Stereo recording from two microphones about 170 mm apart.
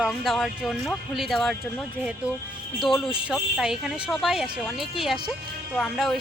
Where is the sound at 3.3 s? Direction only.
Centre (ahead or behind).